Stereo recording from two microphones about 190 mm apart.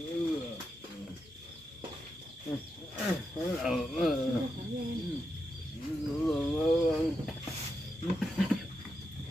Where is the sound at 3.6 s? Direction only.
Centre (ahead or behind).